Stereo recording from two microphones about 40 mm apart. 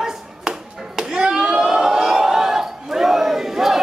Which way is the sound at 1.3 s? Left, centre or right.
Centre.